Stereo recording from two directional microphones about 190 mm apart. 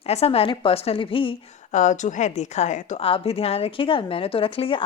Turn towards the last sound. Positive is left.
turn(degrees=30)  # may be behind; listen again after turning